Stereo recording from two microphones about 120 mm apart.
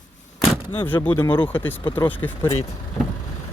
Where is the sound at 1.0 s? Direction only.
20° left (ahead or behind).